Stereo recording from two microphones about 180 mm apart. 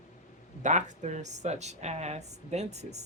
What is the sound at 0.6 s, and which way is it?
A woman's voice, 40° right (ahead or behind).